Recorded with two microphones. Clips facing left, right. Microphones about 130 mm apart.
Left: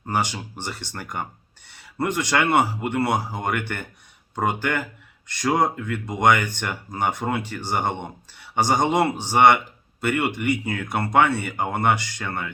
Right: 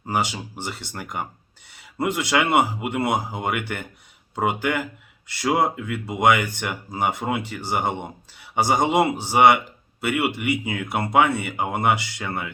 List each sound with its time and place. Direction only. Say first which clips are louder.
0.0 s speech: even; 10° right (ahead or behind)